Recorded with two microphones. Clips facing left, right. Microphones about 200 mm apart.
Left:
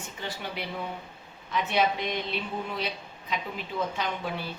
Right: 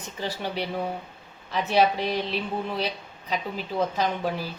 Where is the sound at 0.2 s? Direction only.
35° right (ahead or behind).